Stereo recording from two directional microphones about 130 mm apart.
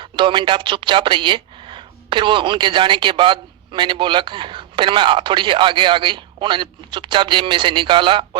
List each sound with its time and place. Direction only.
0.0 s speech: 40° right (ahead or behind)